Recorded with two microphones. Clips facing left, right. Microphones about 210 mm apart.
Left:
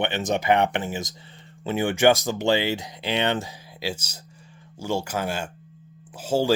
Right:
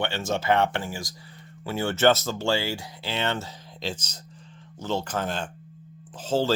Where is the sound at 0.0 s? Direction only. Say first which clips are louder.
Left 3 dB; 20° left (ahead or behind).